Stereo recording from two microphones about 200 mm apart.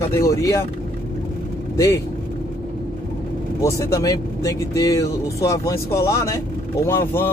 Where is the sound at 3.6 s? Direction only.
15° left (ahead or behind).